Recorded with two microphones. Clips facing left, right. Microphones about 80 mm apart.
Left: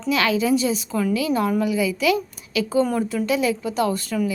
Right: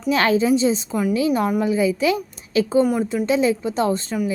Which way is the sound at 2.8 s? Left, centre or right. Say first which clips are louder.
Right 2 dB; centre.